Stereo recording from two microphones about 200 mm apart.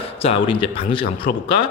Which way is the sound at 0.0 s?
30° left (ahead or behind).